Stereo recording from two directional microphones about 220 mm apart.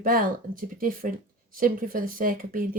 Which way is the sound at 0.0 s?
40° right (ahead or behind).